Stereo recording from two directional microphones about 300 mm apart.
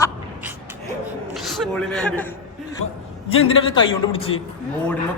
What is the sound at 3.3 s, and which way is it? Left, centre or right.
Speech, centre.